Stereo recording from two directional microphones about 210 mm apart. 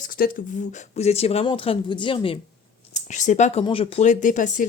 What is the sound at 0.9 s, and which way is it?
Speech, 30° left (ahead or behind).